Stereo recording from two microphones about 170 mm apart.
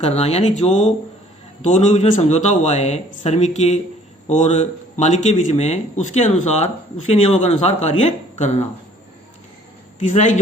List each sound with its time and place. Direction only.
0.0 s speech: 40° left (ahead or behind)
10.0 s a man's voice: 45° left (ahead or behind)